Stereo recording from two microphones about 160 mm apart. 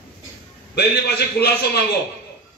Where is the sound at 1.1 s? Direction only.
85° left.